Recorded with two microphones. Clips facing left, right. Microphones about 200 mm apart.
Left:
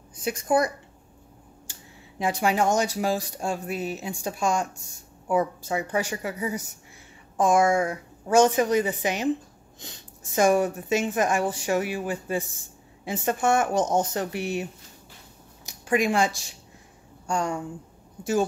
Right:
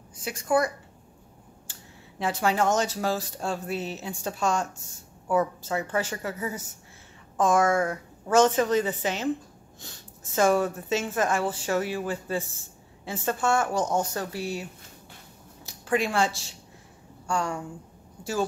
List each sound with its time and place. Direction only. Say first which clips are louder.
0.1 s a woman's voice: left 2 dB; 20° left (ahead or behind)
1.7 s a woman's voice: left 1 dB; 15° left (ahead or behind)